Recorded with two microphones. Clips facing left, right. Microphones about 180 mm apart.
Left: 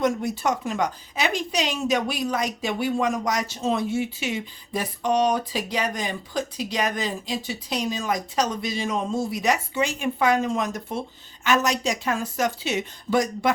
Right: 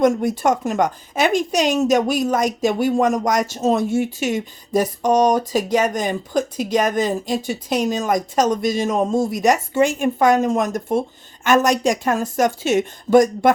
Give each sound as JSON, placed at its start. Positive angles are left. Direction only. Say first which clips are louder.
{"t": 0.0, "sound": "a woman's voice", "louder": "right 7 dB", "side_deg": -50}